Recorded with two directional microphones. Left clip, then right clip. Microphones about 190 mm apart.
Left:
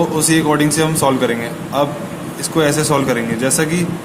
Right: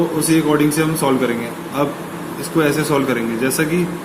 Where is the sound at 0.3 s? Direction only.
35° left (ahead or behind).